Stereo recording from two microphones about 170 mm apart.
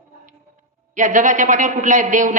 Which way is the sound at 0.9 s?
50° right (ahead or behind).